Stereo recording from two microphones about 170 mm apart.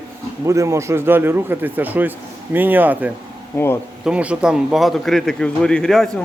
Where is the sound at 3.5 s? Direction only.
15° left (ahead or behind).